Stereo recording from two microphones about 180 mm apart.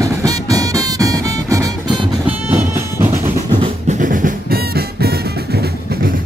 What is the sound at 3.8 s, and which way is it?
Music, 45° right (ahead or behind).